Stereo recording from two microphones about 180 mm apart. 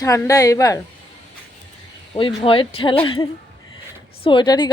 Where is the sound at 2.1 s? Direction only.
30° left (ahead or behind).